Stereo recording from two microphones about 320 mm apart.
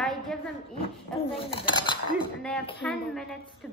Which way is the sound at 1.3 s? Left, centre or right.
Centre.